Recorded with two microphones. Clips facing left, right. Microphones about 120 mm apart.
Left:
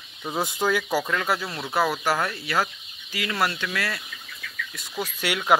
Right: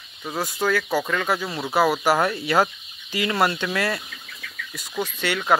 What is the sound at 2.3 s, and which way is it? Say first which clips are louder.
Speech: right 6 dB; 25° right (ahead or behind).